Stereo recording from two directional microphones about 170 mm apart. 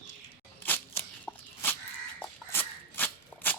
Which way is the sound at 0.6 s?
10° left (ahead or behind).